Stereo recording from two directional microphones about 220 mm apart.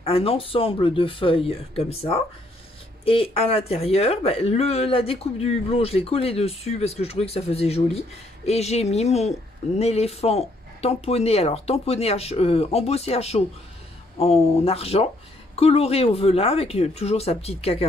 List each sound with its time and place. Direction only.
0.0 s speech: 25° left (ahead or behind)